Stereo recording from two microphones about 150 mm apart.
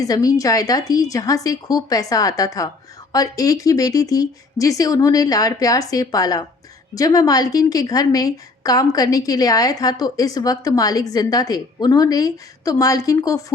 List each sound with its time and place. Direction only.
0.0 s a woman's voice: 25° left (ahead or behind)